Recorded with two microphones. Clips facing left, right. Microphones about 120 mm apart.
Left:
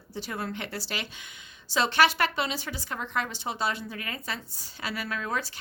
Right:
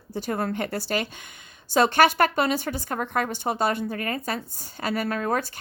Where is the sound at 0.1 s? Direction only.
50° right (ahead or behind).